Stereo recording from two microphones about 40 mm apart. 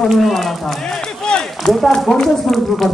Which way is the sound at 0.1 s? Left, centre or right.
Centre.